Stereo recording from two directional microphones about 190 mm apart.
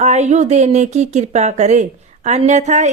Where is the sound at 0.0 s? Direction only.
35° right (ahead or behind).